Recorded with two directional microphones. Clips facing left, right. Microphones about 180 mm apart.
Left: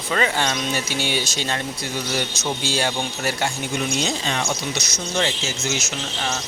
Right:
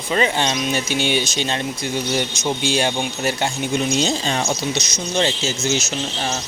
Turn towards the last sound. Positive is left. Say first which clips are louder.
# right 5 dB
turn(degrees=-25)  # may be behind; listen again after turning